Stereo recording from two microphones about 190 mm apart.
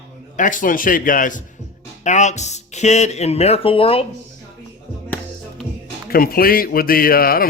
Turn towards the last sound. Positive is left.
turn(degrees=50)  # may be behind; listen again after turning